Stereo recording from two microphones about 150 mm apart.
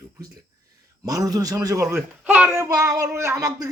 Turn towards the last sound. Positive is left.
turn(degrees=-20)  # may be behind; listen again after turning